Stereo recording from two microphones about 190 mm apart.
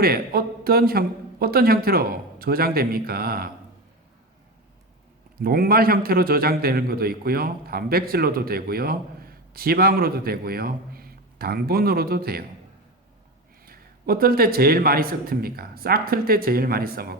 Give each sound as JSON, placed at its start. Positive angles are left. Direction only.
{"t": 0.0, "sound": "a man's voice", "side_deg": -55}
{"t": 5.4, "sound": "a man's voice", "side_deg": -50}
{"t": 13.7, "sound": "a man's voice", "side_deg": -50}